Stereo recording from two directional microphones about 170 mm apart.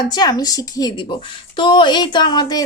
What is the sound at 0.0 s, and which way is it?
A woman's voice, 25° left (ahead or behind).